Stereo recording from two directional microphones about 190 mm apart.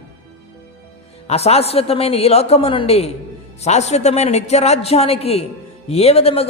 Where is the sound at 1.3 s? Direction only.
35° left (ahead or behind).